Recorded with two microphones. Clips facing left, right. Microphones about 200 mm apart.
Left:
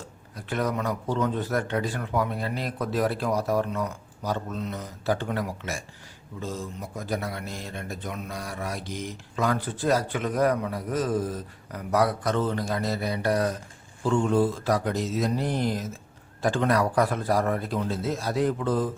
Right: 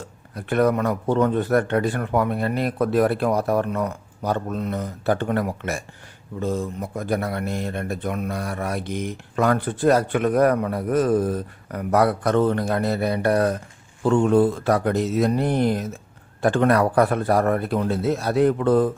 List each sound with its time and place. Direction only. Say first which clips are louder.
0.3 s speech: right 8 dB; 60° right (ahead or behind)